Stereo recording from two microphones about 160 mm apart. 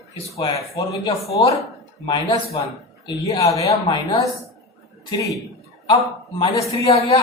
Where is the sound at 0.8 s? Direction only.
20° left (ahead or behind).